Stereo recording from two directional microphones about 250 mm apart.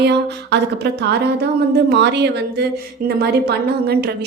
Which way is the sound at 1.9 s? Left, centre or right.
Right.